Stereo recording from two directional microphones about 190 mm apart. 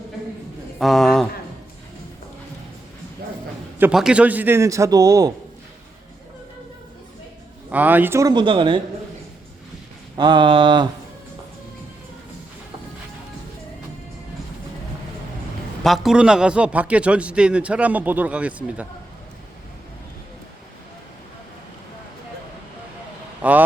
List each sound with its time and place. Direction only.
0.8 s a man's voice: centre (ahead or behind)
3.8 s a man's voice: 5° right (ahead or behind)
7.7 s a man's voice: 10° right (ahead or behind); by 8.8 s 25° right (ahead or behind)
10.2 s a sound: 25° right (ahead or behind)
15.8 s a man's voice: centre (ahead or behind)
23.4 s a man's voice: 10° right (ahead or behind)